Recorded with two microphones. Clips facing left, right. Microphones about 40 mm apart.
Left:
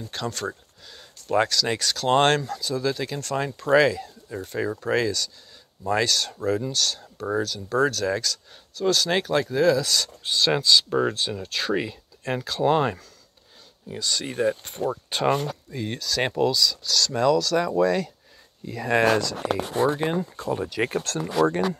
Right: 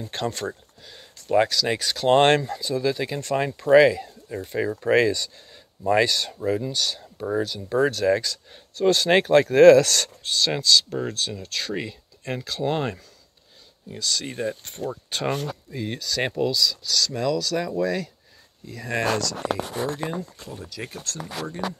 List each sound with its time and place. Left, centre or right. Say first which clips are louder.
0.0 s speech: right 2 dB; right
1.3 s speech: right 2 dB; centre
4.7 s speech: right 6 dB; right
8.7 s speech: right 4 dB; right
9.5 s speech: right 10 dB; right
10.2 s speech: left 2 dB; centre
18.7 s speech: left 5 dB; left
20.3 s speech: left 10 dB; left